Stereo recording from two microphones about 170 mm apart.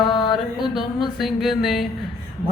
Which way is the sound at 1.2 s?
Centre (ahead or behind).